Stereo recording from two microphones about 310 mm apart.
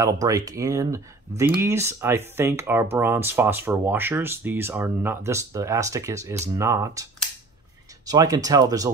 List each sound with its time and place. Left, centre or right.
0.0 s speech: centre
6.3 s speech: right
6.6 s speech: centre